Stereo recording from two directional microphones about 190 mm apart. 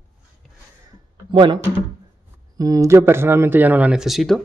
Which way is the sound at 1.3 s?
25° right (ahead or behind).